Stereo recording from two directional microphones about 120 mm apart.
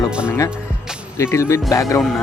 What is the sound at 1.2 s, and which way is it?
Speech, 25° left (ahead or behind).